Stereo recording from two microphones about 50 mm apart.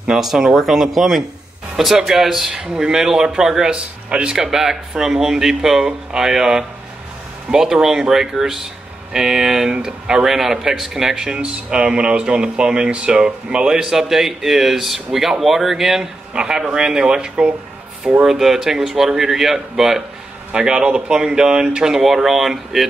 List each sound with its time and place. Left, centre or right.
0.0 s speech: centre
20.5 s speech: centre